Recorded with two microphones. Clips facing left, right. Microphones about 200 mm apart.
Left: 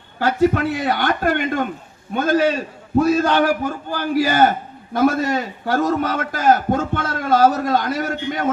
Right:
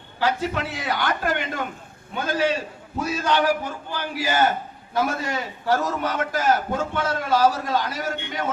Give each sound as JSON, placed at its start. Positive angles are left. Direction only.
{"t": 0.2, "sound": "a man's voice", "side_deg": 50}